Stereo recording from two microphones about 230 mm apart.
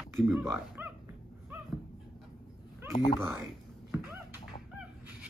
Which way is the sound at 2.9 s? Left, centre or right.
Left.